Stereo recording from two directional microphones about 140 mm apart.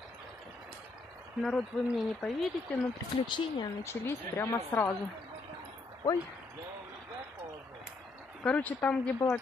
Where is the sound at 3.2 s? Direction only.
35° left (ahead or behind).